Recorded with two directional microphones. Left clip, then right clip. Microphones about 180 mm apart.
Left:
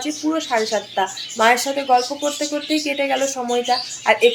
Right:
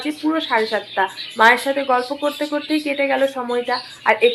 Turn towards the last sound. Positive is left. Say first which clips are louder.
# even
turn(degrees=10)  # may be behind; listen again after turning